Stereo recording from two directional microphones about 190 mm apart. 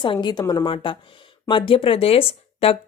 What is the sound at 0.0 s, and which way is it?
A woman's voice, 25° left (ahead or behind).